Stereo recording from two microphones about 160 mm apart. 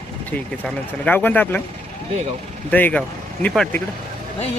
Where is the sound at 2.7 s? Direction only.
10° left (ahead or behind).